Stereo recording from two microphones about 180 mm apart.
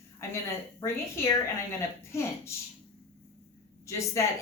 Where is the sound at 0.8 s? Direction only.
15° left (ahead or behind).